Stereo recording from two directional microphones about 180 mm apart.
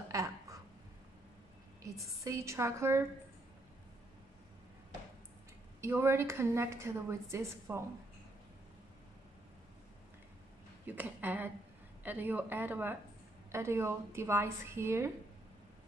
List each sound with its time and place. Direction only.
0.1 s a sound: 20° right (ahead or behind)
2.2 s a woman's voice: 15° right (ahead or behind)
5.8 s a woman's voice: 15° right (ahead or behind)
10.9 s a woman's voice: 10° right (ahead or behind)